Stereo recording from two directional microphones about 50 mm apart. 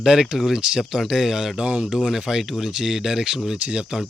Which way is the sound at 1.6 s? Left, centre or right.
Right.